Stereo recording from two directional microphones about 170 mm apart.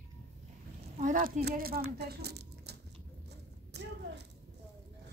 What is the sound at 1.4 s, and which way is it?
Speech, 60° right (ahead or behind).